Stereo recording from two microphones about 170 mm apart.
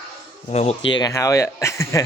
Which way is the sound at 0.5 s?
40° left (ahead or behind).